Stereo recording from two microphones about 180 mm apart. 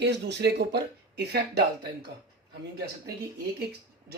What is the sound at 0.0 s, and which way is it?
Speech, 70° right (ahead or behind).